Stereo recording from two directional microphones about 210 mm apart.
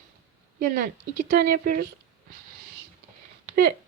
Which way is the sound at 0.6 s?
40° right (ahead or behind).